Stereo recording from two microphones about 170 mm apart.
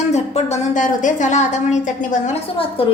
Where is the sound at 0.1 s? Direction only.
40° left (ahead or behind).